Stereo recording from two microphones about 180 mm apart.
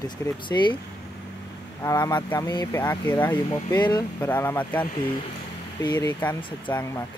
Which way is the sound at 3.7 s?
25° left (ahead or behind).